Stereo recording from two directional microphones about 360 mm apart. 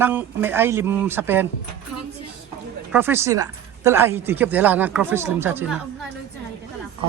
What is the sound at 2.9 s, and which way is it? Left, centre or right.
Speech, centre.